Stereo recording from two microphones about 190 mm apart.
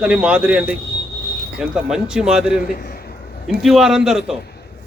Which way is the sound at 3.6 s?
Centre (ahead or behind).